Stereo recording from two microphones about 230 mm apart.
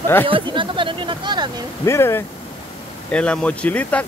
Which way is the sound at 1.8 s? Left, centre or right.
Centre.